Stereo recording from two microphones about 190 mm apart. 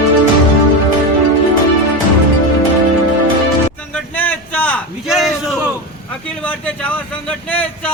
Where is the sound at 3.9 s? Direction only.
10° left (ahead or behind).